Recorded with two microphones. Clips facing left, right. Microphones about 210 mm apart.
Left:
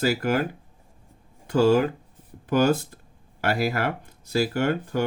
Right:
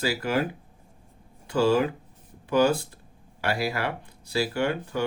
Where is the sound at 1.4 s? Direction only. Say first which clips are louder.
Left 3 dB; 45° left (ahead or behind).